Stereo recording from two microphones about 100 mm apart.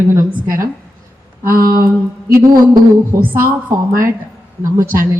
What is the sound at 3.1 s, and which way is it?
Speech, 20° right (ahead or behind).